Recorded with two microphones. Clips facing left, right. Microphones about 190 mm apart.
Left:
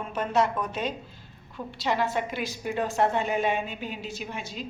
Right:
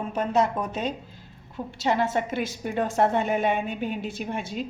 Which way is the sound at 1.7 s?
45° right (ahead or behind).